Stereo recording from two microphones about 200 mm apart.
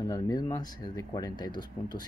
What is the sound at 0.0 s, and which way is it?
Speech, 15° left (ahead or behind).